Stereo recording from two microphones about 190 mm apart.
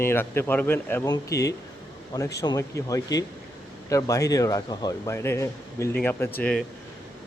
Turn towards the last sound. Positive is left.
turn(degrees=5)  # may be behind; listen again after turning